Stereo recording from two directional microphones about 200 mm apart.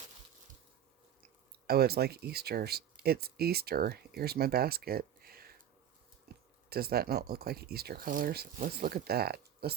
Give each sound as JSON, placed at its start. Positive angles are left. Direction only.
{"t": 1.6, "sound": "speech", "side_deg": -50}